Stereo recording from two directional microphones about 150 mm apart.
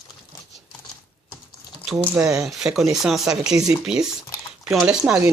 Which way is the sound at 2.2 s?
5° right (ahead or behind).